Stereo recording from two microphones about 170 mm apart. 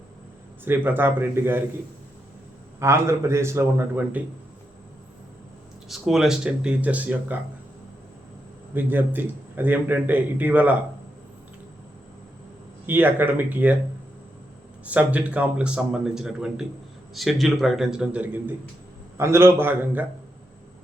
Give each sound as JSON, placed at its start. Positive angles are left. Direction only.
{"t": 0.6, "sound": "a man's voice", "side_deg": -10}
{"t": 2.8, "sound": "a man's voice", "side_deg": -15}
{"t": 5.9, "sound": "speech", "side_deg": 0}
{"t": 8.7, "sound": "a man's voice", "side_deg": -10}
{"t": 12.8, "sound": "a man's voice", "side_deg": -10}
{"t": 14.8, "sound": "a man's voice", "side_deg": -10}